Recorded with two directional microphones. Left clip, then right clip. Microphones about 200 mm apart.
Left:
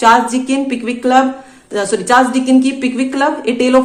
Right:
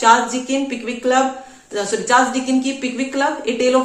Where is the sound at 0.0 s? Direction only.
55° left (ahead or behind).